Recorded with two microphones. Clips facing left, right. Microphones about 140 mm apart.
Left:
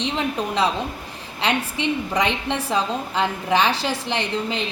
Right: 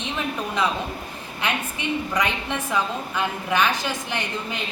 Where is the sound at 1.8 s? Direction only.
25° left (ahead or behind).